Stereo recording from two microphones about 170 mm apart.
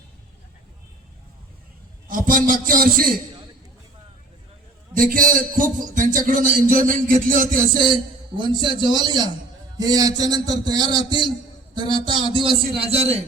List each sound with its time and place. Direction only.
2.0 s a man's voice: 50° right (ahead or behind)
4.9 s a man's voice: 55° right (ahead or behind)
7.7 s a man's voice: 25° right (ahead or behind)